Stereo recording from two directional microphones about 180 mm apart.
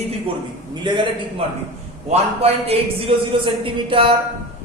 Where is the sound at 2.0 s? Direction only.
35° right (ahead or behind).